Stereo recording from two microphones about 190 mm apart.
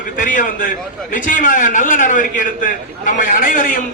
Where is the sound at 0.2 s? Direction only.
45° left (ahead or behind).